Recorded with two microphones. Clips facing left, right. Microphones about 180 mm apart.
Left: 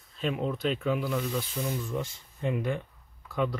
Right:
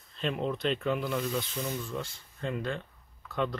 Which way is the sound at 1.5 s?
20° left (ahead or behind).